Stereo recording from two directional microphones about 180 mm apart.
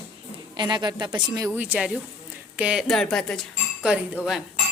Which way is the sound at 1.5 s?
10° right (ahead or behind).